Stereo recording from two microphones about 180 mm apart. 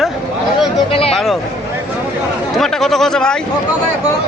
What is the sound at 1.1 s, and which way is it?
Speech, centre (ahead or behind).